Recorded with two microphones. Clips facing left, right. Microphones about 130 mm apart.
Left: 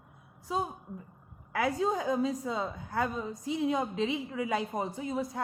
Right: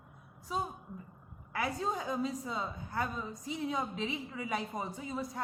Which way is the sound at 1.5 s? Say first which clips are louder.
Left 6 dB; 90° left.